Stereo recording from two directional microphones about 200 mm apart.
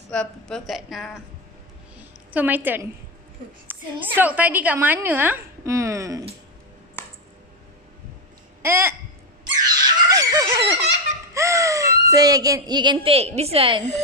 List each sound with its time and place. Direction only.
0.1 s a woman's voice: 5° left (ahead or behind)
2.0 s a sound: 10° right (ahead or behind)
3.6 s a woman's voice: 10° right (ahead or behind)
8.6 s hiccup: 15° right (ahead or behind)
9.7 s fowl: 20° right (ahead or behind)
11.3 s a sound: 15° right (ahead or behind)
13.4 s a woman's voice: 30° right (ahead or behind)